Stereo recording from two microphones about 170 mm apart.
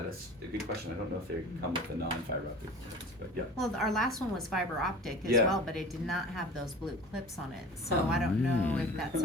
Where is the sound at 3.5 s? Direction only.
Centre (ahead or behind).